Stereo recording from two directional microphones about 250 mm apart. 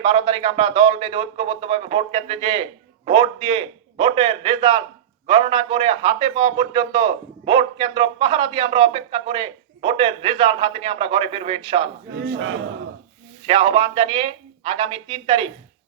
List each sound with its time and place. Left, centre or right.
0.0 s a man's voice: right
12.1 s battle cry: right
13.4 s a man's voice: right